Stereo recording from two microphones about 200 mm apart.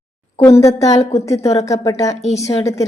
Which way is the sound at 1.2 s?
15° left (ahead or behind).